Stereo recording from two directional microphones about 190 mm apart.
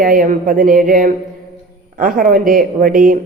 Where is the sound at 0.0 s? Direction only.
45° right (ahead or behind).